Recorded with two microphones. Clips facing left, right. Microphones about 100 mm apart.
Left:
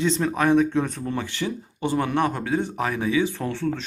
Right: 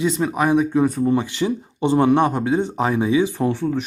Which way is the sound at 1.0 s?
20° right (ahead or behind).